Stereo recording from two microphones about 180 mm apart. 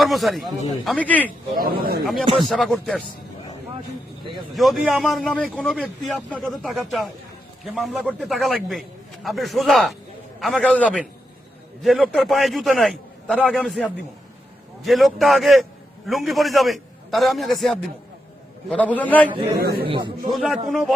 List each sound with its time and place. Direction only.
0.0 s a man's voice: centre (ahead or behind)
1.5 s a man's voice: 55° right (ahead or behind)
2.4 s a man's voice: centre (ahead or behind)
4.5 s a man's voice: centre (ahead or behind)
19.5 s a man's voice: 60° right (ahead or behind)
19.8 s a man's voice: 30° right (ahead or behind)
20.3 s a man's voice: centre (ahead or behind)